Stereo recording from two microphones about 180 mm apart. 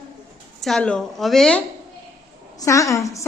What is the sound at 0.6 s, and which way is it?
A woman's voice, centre (ahead or behind).